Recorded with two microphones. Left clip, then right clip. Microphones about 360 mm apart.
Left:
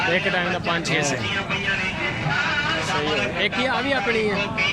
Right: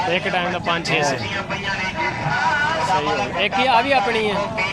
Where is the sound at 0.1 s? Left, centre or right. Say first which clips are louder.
Right 1 dB; centre.